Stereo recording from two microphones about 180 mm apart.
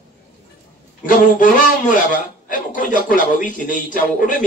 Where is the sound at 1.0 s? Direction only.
45° left (ahead or behind).